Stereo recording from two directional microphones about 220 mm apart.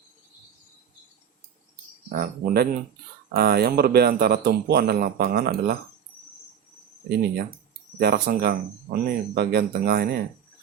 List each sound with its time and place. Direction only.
2.0 s speech: 45° right (ahead or behind)
7.9 s speech: 45° right (ahead or behind)